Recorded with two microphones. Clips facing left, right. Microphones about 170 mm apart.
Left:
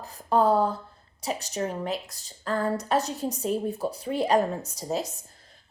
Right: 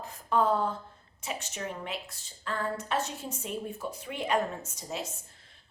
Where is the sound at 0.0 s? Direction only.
35° left (ahead or behind).